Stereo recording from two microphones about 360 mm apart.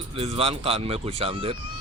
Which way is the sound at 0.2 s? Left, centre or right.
Centre.